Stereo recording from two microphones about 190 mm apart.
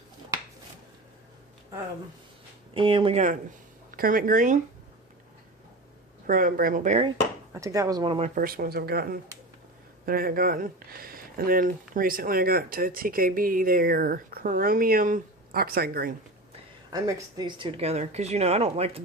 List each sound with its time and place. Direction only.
2.7 s speech: 25° right (ahead or behind)
3.9 s speech: 45° right (ahead or behind)
6.2 s speech: 45° right (ahead or behind)
7.5 s speech: 15° right (ahead or behind)
8.4 s speech: 50° right (ahead or behind)
16.9 s speech: 20° right (ahead or behind)